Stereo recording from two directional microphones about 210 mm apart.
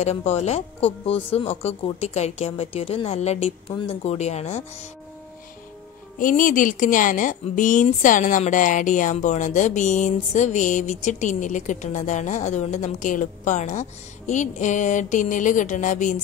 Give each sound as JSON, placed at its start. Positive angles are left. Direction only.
{"t": 0.0, "sound": "a woman's voice", "side_deg": 30}
{"t": 6.1, "sound": "a woman's voice", "side_deg": 40}